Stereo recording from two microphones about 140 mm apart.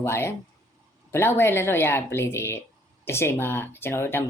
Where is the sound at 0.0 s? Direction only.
20° left (ahead or behind).